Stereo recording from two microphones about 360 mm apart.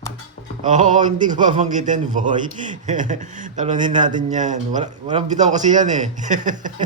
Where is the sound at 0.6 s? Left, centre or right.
Centre.